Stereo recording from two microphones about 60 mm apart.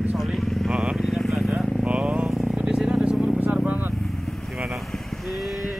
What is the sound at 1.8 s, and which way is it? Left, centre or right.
Vehicle, centre.